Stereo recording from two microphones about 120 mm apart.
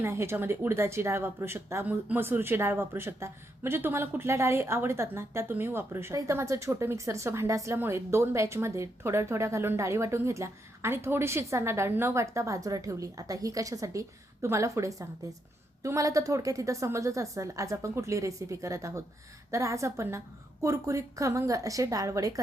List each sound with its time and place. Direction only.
0.0 s speech: 20° right (ahead or behind)